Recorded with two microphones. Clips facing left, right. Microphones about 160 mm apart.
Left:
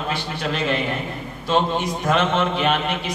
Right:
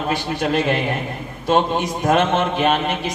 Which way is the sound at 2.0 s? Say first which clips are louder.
Right 3 dB; 45° right (ahead or behind).